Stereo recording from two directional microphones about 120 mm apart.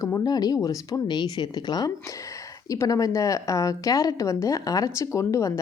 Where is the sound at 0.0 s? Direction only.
30° left (ahead or behind).